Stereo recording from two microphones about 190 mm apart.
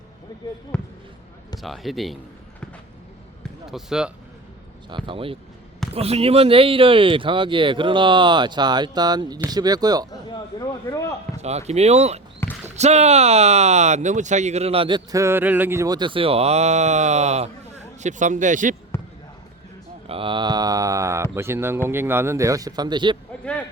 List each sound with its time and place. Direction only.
0.7 s a man's voice: 5° left (ahead or behind)
3.7 s a man's voice: centre (ahead or behind)
4.9 s speech: 25° right (ahead or behind)
10.2 s speech: 20° left (ahead or behind)
11.3 s speech: 35° right (ahead or behind)
20.1 s a sound: 30° right (ahead or behind)
21.3 s speech: 15° right (ahead or behind)